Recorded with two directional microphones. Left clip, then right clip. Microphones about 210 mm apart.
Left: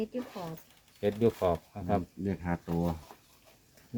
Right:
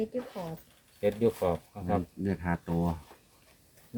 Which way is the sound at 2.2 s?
35° right (ahead or behind).